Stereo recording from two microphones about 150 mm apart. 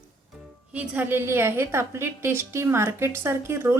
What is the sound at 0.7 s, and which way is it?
Speech, 10° right (ahead or behind).